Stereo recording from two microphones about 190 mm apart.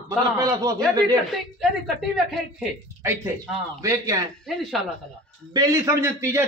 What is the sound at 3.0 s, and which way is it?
A man's voice, 15° right (ahead or behind).